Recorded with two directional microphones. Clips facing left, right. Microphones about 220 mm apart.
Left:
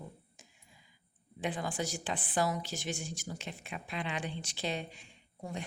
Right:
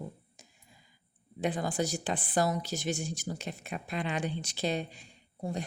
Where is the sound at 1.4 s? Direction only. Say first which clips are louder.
Right 5 dB; 40° right (ahead or behind).